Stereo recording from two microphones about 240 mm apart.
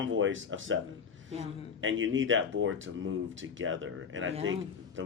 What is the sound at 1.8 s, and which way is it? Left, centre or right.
Speech, right.